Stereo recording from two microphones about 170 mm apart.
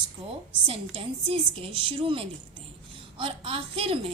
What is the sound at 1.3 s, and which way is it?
A woman's voice, 30° right (ahead or behind).